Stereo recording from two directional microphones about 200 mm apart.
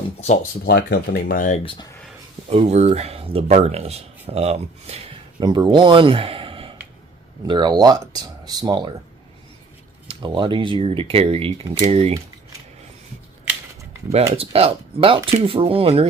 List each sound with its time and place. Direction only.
0.6 s speech: 50° left (ahead or behind); by 1.9 s 25° left (ahead or behind)
2.5 s speech: 30° right (ahead or behind)
10.1 s speech: 25° right (ahead or behind)
14.3 s speech: 30° right (ahead or behind)